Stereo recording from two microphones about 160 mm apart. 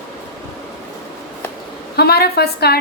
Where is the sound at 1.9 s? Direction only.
80° left.